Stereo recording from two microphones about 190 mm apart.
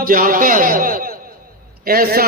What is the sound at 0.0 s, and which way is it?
A man's voice, 50° right (ahead or behind).